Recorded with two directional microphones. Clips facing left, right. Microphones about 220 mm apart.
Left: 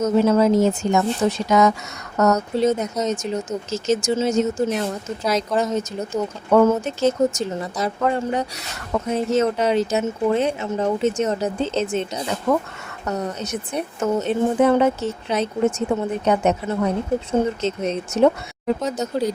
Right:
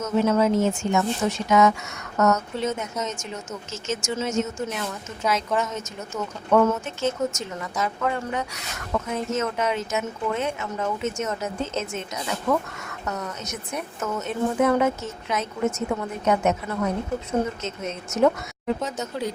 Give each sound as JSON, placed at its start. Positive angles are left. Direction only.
{"t": 0.0, "sound": "speech", "side_deg": 35}